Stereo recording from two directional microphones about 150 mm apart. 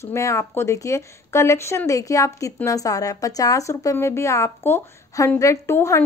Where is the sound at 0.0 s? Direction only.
20° left (ahead or behind).